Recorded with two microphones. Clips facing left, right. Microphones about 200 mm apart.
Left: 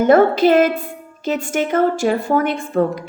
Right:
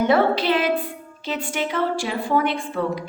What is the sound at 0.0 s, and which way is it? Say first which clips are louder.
A woman's voice: left 7 dB; 45° left (ahead or behind).